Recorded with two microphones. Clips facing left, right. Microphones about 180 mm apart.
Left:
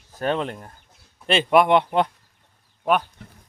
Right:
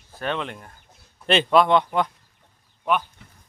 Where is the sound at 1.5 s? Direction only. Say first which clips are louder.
Left 2 dB; 20° left (ahead or behind).